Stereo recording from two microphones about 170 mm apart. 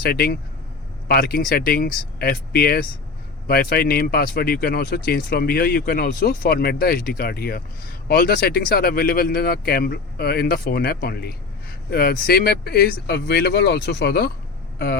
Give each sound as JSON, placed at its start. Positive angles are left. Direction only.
{"t": 0.0, "sound": "speech", "side_deg": 65}